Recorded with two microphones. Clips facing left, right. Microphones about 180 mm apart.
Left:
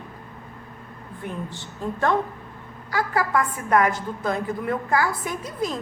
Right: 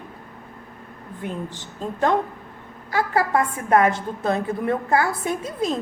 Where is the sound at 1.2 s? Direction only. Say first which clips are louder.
Right 2 dB; 20° right (ahead or behind).